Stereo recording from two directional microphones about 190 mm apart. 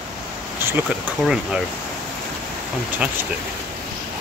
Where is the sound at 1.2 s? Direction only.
Centre (ahead or behind).